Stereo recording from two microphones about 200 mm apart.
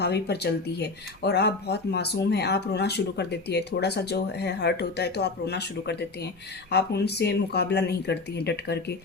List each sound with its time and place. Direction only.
0.0 s speech: 55° left (ahead or behind)